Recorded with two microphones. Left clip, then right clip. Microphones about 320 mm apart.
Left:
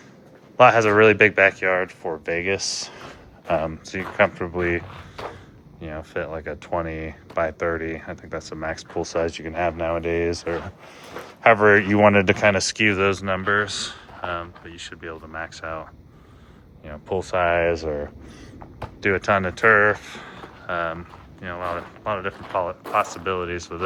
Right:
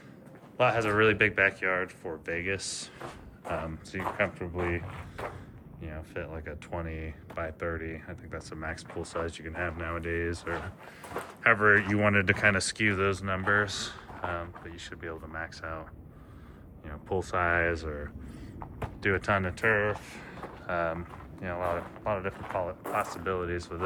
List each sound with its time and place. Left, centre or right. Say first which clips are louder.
0.5 s speech: left 11 dB; left
20.1 s a sound: left 5 dB; centre
21.4 s speech: left 4 dB; centre